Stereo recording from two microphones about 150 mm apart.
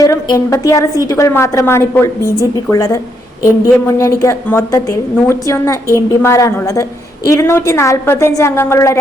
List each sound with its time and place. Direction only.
0.0 s a woman's voice: 20° left (ahead or behind)